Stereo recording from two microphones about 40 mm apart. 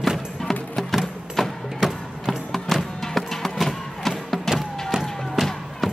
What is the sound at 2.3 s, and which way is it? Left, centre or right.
Music, centre.